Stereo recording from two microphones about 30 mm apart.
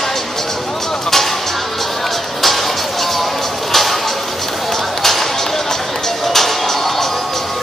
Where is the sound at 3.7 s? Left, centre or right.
Centre.